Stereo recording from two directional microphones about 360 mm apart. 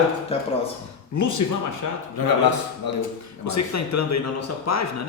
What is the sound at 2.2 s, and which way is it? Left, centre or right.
Speech, left.